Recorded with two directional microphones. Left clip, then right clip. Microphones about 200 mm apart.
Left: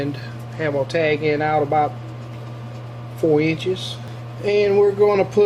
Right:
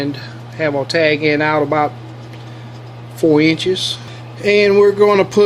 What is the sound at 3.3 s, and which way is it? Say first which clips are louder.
Speech: right 7 dB; 40° right (ahead or behind).